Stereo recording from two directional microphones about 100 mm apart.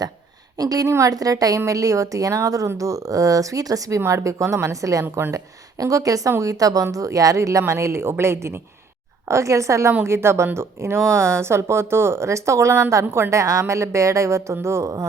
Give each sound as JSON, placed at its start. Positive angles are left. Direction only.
{"t": 0.6, "sound": "a woman's voice", "side_deg": -40}
{"t": 5.0, "sound": "speech", "side_deg": -20}
{"t": 5.8, "sound": "a woman's voice", "side_deg": -35}